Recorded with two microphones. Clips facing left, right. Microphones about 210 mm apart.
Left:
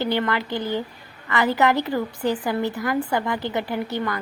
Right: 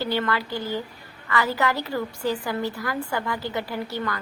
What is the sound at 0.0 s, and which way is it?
A woman's voice, 20° left (ahead or behind).